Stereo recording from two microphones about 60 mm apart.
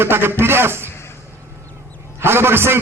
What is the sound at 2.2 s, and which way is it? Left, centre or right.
Speech, right.